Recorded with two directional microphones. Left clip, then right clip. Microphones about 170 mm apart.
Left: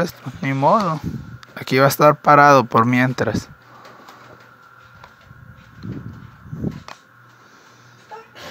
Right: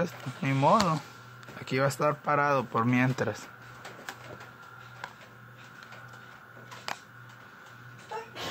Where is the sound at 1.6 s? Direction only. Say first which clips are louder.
Left 14 dB; 40° left (ahead or behind).